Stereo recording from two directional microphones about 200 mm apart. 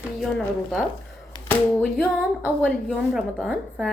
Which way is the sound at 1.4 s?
10° left (ahead or behind).